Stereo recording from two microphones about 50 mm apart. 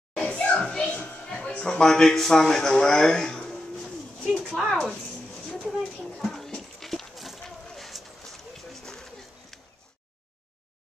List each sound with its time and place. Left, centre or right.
0.1 s children playing: centre
1.0 s a man's voice: left
3.8 s a sound: centre
4.5 s speech: centre
4.7 s a woman's voice: centre
6.1 s a sound: centre